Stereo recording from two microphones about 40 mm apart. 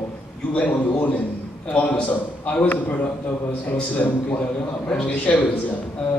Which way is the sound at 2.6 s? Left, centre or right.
Left.